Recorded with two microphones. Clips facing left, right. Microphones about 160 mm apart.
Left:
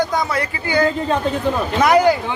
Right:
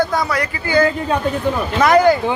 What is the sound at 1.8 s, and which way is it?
Speech, 10° left (ahead or behind).